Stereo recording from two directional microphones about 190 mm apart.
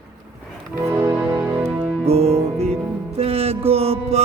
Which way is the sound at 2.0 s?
35° right (ahead or behind).